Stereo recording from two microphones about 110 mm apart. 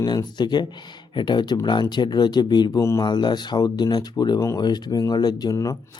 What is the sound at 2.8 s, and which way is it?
Speech, 30° left (ahead or behind).